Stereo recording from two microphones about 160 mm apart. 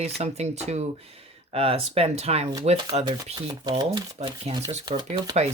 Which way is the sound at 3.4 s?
25° right (ahead or behind).